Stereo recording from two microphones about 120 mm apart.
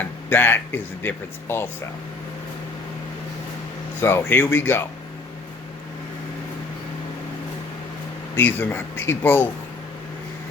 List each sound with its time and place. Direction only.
0.0 s speech: 15° left (ahead or behind)
4.0 s speech: 20° left (ahead or behind)
8.4 s speech: 15° left (ahead or behind)